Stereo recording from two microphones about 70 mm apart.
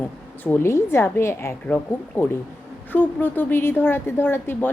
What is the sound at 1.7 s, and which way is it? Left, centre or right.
A woman's voice, left.